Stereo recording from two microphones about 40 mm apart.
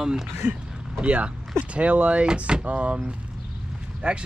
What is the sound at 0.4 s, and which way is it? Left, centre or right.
Speech, right.